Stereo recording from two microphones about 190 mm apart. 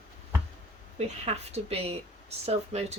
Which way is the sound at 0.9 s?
35° right (ahead or behind).